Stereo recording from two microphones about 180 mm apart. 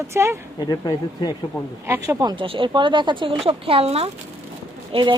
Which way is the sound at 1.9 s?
20° right (ahead or behind).